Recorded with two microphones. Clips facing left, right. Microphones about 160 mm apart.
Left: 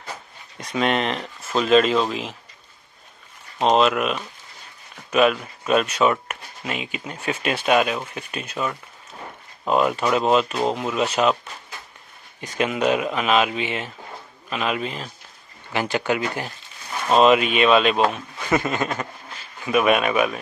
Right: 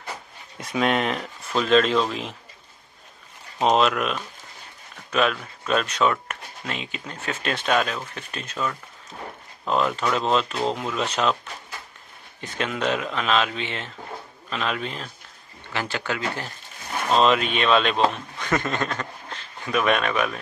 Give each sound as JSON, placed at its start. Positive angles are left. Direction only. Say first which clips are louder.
{"t": 0.6, "sound": "speech", "louder": "left 1 dB", "side_deg": 0}
{"t": 3.6, "sound": "speech", "louder": "left 2 dB", "side_deg": 0}
{"t": 12.4, "sound": "speech", "louder": "left 5 dB", "side_deg": 10}
{"t": 15.7, "sound": "a man's voice", "louder": "left 6 dB", "side_deg": 15}